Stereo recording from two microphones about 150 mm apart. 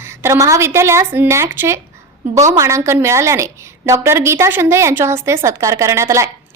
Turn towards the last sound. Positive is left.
turn(degrees=-20)  # may be behind; listen again after turning